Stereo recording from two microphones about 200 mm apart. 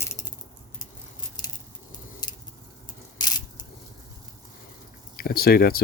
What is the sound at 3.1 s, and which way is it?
Coin, 20° left (ahead or behind).